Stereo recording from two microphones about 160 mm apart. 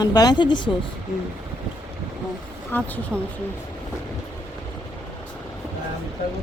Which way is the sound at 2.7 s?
10° left (ahead or behind).